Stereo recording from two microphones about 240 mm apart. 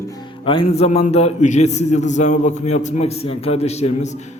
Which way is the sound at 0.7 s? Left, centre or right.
Left.